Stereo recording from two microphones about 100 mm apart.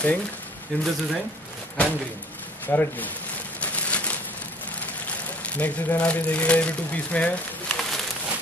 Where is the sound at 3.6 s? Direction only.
15° left (ahead or behind).